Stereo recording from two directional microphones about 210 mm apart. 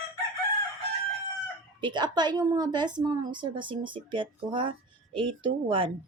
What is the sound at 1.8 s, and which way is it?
Speech, 20° right (ahead or behind).